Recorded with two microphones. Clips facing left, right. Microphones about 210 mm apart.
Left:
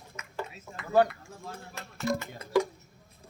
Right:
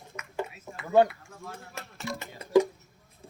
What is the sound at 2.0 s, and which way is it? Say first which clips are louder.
Music: left 7 dB; 40° left (ahead or behind).